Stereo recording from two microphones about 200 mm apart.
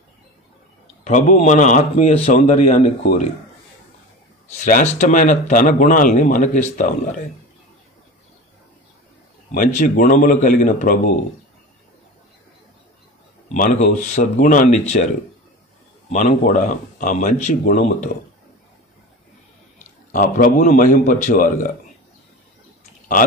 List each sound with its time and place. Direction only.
1.0 s a man's voice: 35° left (ahead or behind)
4.6 s a man's voice: 40° left (ahead or behind)
9.5 s a man's voice: 40° left (ahead or behind)
13.5 s a man's voice: 35° left (ahead or behind)
16.1 s a man's voice: 35° left (ahead or behind)
20.1 s a man's voice: 40° left (ahead or behind)